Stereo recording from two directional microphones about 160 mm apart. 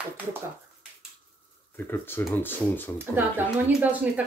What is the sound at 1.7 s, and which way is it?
Speech, 15° left (ahead or behind).